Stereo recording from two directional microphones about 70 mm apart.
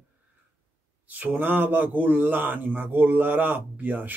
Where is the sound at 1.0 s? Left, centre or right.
Right.